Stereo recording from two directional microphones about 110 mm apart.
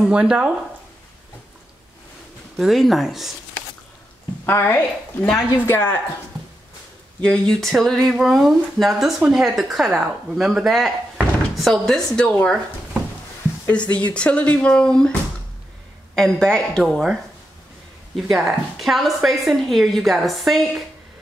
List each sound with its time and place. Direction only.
0.0 s speech: 5° right (ahead or behind)
2.5 s speech: centre (ahead or behind)
4.5 s a woman's voice: 20° left (ahead or behind)
7.2 s speech: 5° left (ahead or behind)
13.9 s speech: 10° left (ahead or behind)
16.2 s speech: 5° left (ahead or behind)
18.1 s speech: centre (ahead or behind)